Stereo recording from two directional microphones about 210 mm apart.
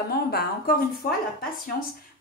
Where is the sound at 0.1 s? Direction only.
50° left (ahead or behind).